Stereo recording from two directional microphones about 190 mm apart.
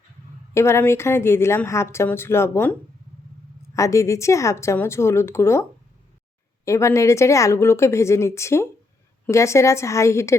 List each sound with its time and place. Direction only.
0.5 s a woman's voice: 15° left (ahead or behind)
3.8 s a woman's voice: 15° left (ahead or behind)
6.7 s a woman's voice: 15° left (ahead or behind)